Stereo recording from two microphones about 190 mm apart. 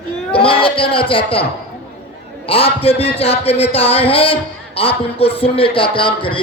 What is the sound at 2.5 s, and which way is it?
A man's voice, 30° left (ahead or behind).